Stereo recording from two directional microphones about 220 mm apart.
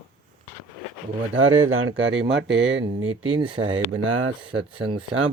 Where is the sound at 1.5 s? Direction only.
70° right (ahead or behind).